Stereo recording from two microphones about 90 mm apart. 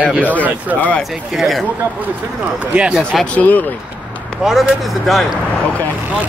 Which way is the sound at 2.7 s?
10° right (ahead or behind).